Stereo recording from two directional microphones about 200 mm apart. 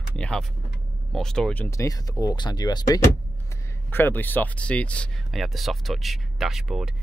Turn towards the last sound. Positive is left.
turn(degrees=0)  # may be behind; listen again after turning